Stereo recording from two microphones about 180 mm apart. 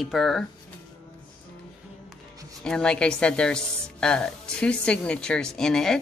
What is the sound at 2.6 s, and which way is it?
Speech, 5° left (ahead or behind).